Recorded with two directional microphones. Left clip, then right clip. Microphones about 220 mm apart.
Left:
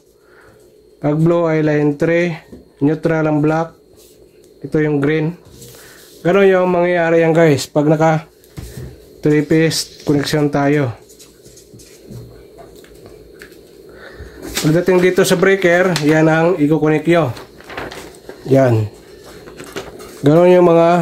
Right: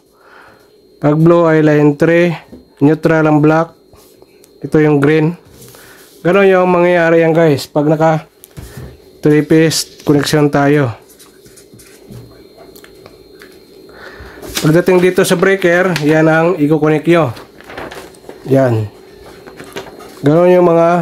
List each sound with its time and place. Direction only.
1.0 s speech: 25° right (ahead or behind)
4.6 s speech: 25° right (ahead or behind)
14.5 s speech: 25° right (ahead or behind)
15.0 s speech: 15° right (ahead or behind)
18.5 s speech: 5° right (ahead or behind)
20.2 s speech: centre (ahead or behind)